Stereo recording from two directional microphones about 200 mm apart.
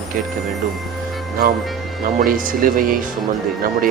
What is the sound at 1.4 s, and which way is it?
Speech, 45° right (ahead or behind).